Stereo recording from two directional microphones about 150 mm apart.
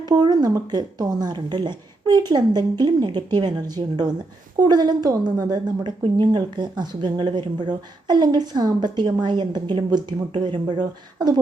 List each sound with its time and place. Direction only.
0.0 s a woman's voice: 30° right (ahead or behind)